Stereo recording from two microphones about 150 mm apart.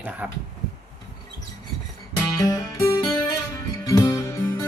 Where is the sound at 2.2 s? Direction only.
25° left (ahead or behind).